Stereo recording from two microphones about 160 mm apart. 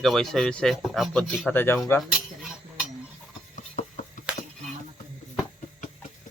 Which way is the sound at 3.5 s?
50° left (ahead or behind).